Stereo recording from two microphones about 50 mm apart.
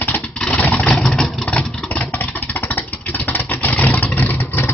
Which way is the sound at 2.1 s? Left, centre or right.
Left.